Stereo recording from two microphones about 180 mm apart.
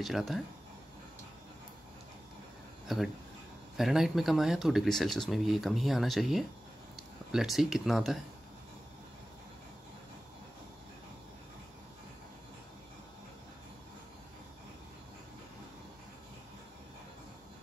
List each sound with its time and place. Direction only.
0.0 s speech: centre (ahead or behind)
3.7 s speech: centre (ahead or behind)